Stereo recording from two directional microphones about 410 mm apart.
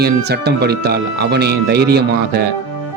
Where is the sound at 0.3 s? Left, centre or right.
Right.